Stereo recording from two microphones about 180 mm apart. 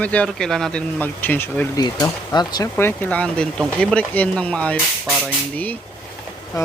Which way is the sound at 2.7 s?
10° left (ahead or behind).